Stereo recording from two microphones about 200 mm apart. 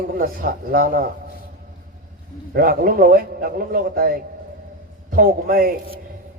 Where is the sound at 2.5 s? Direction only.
45° right (ahead or behind).